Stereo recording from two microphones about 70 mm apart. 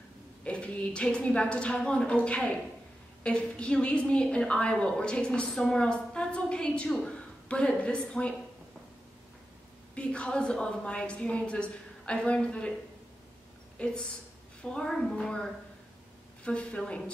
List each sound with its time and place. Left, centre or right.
0.4 s a woman's voice: centre
9.9 s a woman's voice: centre
13.8 s a woman's voice: centre